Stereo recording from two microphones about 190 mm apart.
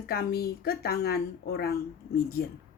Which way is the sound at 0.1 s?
55° left (ahead or behind).